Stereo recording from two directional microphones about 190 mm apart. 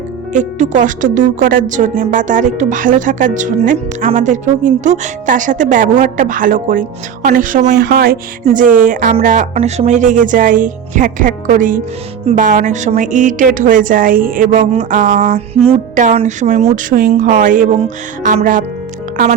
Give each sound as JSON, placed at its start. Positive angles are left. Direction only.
{"t": 0.3, "sound": "a woman's voice", "side_deg": -40}